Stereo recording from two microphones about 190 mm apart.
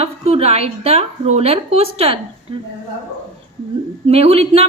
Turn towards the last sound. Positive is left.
turn(degrees=-30)  # may be behind; listen again after turning